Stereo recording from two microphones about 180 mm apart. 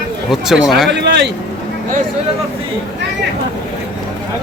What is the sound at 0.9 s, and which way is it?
Speech, 75° right (ahead or behind).